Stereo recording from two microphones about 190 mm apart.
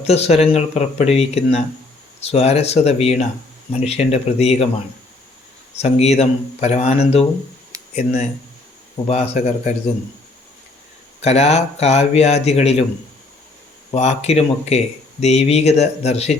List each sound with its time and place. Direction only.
0.0 s speech: 35° left (ahead or behind)
5.7 s speech: 35° left (ahead or behind)
7.7 s a sound: 15° right (ahead or behind)
9.0 s speech: 30° left (ahead or behind)
11.2 s speech: 35° left (ahead or behind)
13.9 s speech: 35° left (ahead or behind)